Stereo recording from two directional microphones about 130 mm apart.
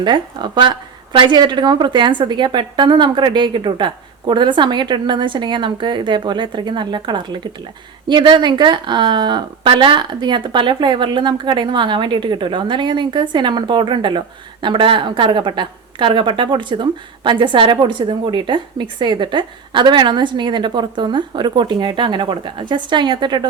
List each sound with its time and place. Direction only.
0.0 s a woman's voice: 35° right (ahead or behind)